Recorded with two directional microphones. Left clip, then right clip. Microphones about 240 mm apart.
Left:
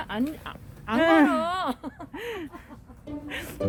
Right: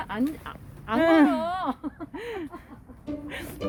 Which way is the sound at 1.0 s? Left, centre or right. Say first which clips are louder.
Even; centre.